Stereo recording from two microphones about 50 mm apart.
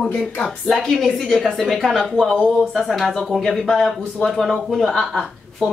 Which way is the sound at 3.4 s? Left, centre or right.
Centre.